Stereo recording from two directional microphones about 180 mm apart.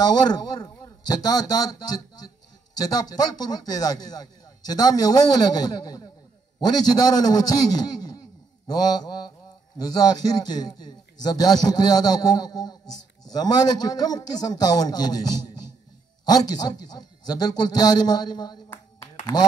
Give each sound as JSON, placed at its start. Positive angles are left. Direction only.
{"t": 0.0, "sound": "a man's voice", "side_deg": 20}